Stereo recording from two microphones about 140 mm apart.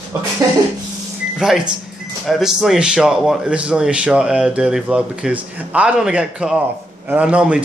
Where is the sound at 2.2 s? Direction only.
Centre (ahead or behind).